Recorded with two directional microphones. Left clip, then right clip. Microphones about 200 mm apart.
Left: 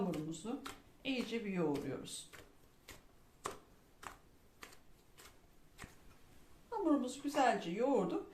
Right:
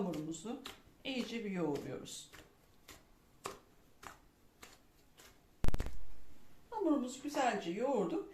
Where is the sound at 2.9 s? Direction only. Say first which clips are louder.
Left 1 dB; 5° left (ahead or behind).